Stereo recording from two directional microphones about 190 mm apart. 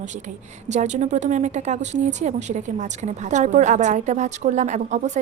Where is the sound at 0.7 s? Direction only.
40° right (ahead or behind).